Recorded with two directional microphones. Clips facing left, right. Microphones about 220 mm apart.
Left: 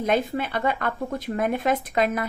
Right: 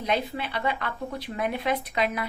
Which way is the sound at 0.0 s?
50° left (ahead or behind).